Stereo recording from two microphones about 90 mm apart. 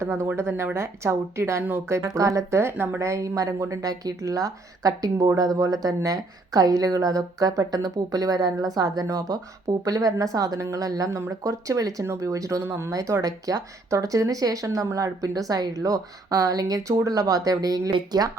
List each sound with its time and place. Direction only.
0.0 s speech: 30° right (ahead or behind)
2.0 s speech: 35° right (ahead or behind)
3.0 s speech: 35° right (ahead or behind)